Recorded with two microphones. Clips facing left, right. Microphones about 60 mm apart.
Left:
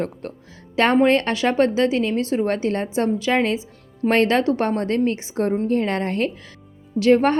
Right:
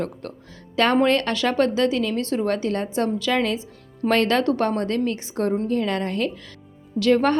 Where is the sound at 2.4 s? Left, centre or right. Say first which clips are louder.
Left 1 dB; left.